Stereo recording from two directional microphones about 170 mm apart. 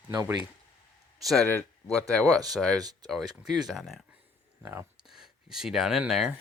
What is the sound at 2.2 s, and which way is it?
Speech, 20° right (ahead or behind).